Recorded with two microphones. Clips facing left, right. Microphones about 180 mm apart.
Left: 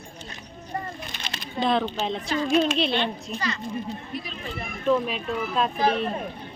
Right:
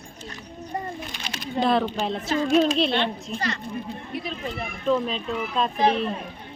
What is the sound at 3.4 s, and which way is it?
Speech, 60° right (ahead or behind).